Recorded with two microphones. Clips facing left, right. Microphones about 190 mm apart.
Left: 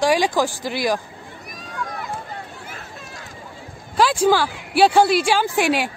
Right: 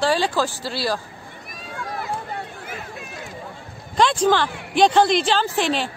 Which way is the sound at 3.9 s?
5° left (ahead or behind).